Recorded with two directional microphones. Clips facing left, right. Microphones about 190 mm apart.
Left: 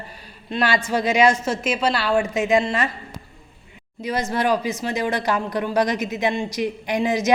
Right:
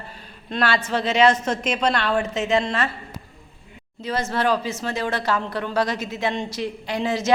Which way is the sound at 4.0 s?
15° left (ahead or behind).